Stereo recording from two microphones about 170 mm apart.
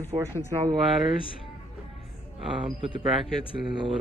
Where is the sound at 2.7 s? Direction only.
30° right (ahead or behind).